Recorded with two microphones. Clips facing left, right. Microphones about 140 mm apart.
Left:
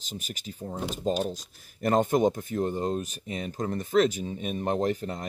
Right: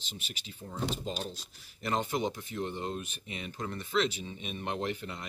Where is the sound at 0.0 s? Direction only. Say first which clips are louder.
Left 7 dB; 45° left (ahead or behind).